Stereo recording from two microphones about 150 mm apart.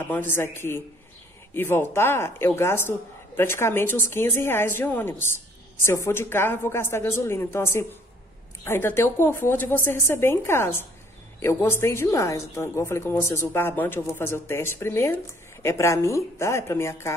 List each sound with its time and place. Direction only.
0.0 s a woman's voice: 15° left (ahead or behind)